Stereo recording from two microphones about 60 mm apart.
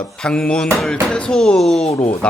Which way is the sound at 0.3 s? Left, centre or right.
Centre.